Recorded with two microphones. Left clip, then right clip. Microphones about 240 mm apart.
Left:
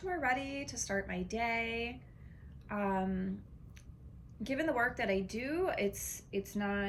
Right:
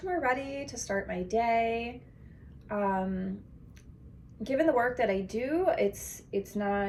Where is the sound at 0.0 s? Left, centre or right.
Centre.